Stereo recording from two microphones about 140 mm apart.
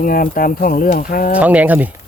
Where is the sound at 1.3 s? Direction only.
10° right (ahead or behind).